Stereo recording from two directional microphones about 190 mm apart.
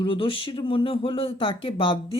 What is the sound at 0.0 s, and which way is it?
Speech, 30° left (ahead or behind).